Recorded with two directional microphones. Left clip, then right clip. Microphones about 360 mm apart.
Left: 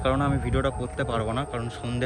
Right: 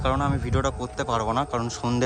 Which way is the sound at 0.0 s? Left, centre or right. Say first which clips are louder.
Even; centre.